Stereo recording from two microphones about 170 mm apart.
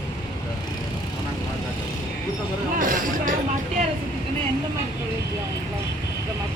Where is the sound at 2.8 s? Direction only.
50° right (ahead or behind).